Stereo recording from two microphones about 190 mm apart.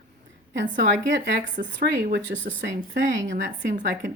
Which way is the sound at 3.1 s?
70° right (ahead or behind).